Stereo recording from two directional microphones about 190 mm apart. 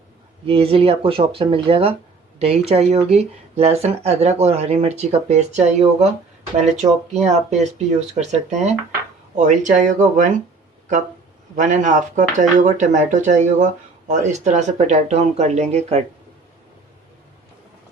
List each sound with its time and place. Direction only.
0.4 s speech: 30° right (ahead or behind)
7.1 s speech: 35° right (ahead or behind)
11.5 s speech: 40° right (ahead or behind)